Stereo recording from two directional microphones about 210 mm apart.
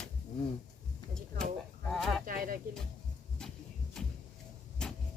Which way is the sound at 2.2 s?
40° right (ahead or behind).